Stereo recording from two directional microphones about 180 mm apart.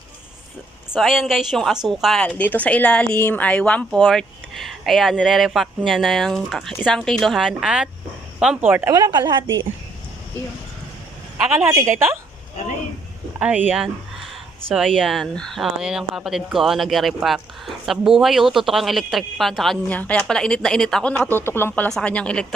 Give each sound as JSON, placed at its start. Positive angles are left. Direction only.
{"t": 0.9, "sound": "speech", "side_deg": 0}
{"t": 11.4, "sound": "a woman's voice", "side_deg": -5}
{"t": 13.4, "sound": "speech", "side_deg": -10}